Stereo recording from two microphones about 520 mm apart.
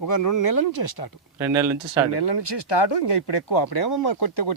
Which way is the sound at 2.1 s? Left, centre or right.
Left.